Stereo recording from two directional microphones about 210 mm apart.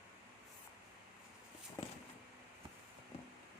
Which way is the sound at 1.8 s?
20° left (ahead or behind).